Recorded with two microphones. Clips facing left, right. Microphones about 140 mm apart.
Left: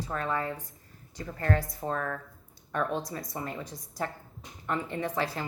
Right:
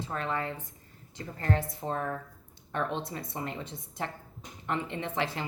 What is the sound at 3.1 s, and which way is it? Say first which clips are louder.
Speech: left 1 dB; 40° left (ahead or behind).